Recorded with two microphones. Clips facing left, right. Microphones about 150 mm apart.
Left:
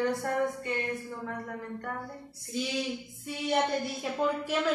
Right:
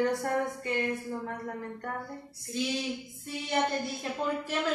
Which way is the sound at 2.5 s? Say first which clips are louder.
Right 1 dB; centre (ahead or behind).